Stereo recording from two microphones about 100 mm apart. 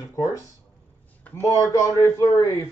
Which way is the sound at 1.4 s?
30° right (ahead or behind).